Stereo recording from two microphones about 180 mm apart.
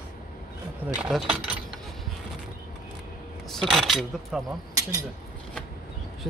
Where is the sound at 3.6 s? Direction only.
Centre (ahead or behind).